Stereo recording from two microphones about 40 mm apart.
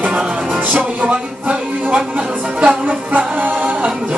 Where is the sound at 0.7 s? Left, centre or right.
Right.